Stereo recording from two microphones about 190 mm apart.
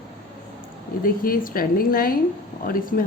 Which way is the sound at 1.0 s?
50° left (ahead or behind).